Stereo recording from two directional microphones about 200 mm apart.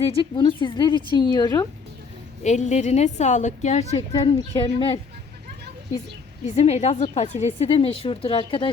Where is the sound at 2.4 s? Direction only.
35° left (ahead or behind).